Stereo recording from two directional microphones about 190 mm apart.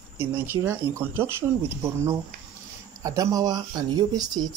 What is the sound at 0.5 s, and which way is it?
A man's voice, 10° right (ahead or behind).